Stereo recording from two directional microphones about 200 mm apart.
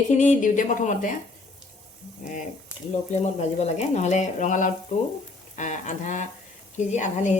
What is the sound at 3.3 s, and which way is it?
Speech, 30° left (ahead or behind).